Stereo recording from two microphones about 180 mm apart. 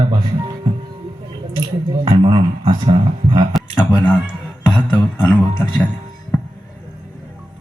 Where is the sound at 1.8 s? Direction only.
25° right (ahead or behind).